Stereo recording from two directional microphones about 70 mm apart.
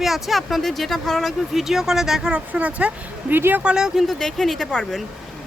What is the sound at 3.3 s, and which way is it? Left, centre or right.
Speech, right.